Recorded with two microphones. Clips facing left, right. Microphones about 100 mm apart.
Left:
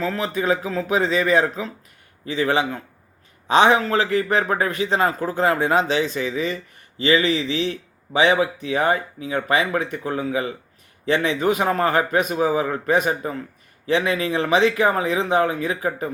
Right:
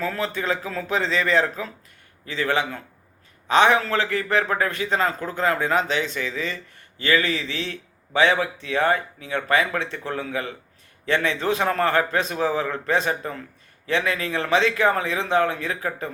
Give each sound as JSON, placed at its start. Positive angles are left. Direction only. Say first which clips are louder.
{"t": 0.2, "sound": "a man's voice", "louder": "left 4 dB", "side_deg": 15}
{"t": 4.1, "sound": "a man's voice", "louder": "left 3 dB", "side_deg": 20}